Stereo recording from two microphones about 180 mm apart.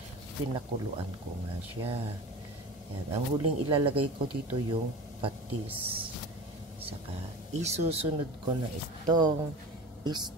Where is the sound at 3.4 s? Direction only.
30° right (ahead or behind).